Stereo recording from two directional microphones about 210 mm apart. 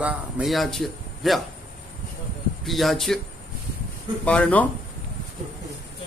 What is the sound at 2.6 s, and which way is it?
Speech, centre (ahead or behind).